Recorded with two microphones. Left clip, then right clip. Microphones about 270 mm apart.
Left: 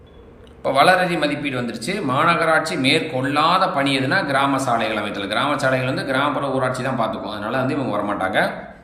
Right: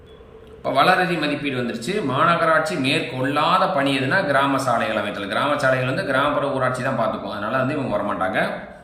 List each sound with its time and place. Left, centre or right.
0.6 s a man's voice: centre